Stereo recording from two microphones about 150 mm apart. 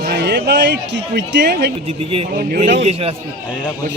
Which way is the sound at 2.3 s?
70° right (ahead or behind).